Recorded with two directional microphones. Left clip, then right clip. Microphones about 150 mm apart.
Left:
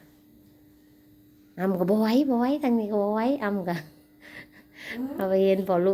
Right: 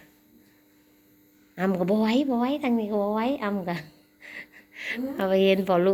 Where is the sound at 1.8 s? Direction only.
40° left (ahead or behind).